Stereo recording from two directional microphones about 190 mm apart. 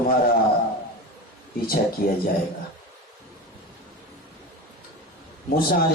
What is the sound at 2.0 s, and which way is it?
Speech, 55° left (ahead or behind).